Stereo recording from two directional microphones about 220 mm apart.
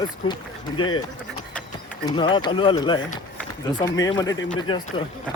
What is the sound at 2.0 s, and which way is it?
Speech, 20° left (ahead or behind).